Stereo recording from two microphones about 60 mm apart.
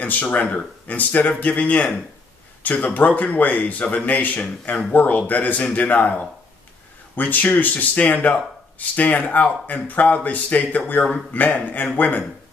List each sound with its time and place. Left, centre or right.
0.0 s a man's voice: left